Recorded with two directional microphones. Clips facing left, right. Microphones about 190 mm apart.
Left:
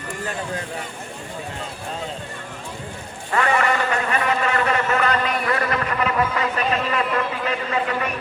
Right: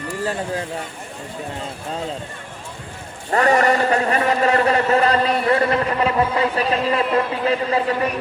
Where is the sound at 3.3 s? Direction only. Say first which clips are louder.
Right 4 dB; 40° right (ahead or behind).